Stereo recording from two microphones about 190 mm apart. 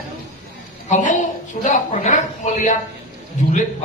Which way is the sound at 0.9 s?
40° left (ahead or behind).